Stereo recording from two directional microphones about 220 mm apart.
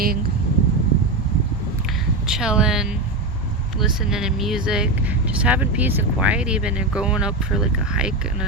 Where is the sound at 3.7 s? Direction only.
5° right (ahead or behind).